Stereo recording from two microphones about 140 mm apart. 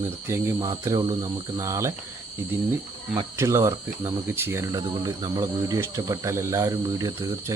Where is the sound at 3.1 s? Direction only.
20° right (ahead or behind).